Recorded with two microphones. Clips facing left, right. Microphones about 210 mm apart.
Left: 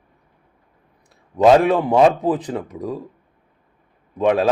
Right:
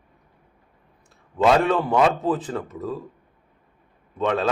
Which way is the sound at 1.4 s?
15° left (ahead or behind).